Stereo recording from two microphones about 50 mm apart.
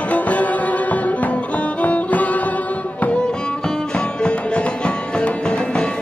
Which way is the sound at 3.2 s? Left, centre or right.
Centre.